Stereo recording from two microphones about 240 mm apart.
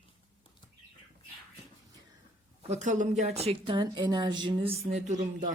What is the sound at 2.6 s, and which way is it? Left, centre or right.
A woman's voice, right.